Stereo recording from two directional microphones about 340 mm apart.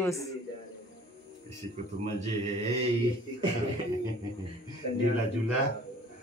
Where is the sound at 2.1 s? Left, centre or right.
Centre.